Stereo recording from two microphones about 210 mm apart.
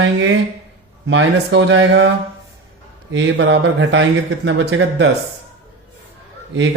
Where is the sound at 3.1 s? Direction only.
60° right (ahead or behind).